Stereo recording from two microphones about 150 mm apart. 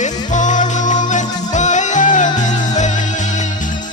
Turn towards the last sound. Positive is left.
turn(degrees=55)  # may be behind; listen again after turning